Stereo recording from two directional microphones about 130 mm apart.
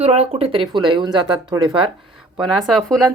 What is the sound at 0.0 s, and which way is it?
Speech, 55° right (ahead or behind).